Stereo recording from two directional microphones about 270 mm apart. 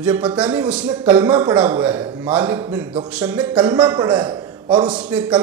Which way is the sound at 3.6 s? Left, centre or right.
Centre.